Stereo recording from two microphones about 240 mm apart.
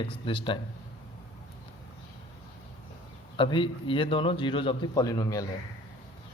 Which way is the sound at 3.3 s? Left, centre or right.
Centre.